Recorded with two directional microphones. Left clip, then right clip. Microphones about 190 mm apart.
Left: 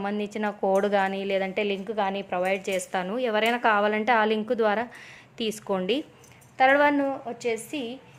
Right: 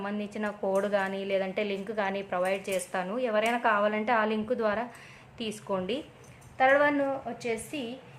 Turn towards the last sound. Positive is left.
turn(degrees=45)  # may be behind; listen again after turning